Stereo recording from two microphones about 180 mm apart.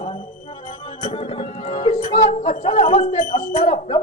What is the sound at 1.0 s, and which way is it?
Music, 30° left (ahead or behind).